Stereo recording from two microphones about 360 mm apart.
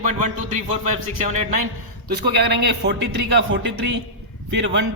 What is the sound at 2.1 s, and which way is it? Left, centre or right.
Speech, right.